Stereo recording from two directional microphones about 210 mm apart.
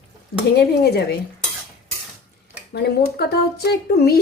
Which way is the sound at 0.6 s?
50° left (ahead or behind).